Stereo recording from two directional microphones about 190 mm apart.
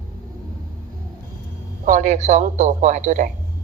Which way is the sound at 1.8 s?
40° right (ahead or behind).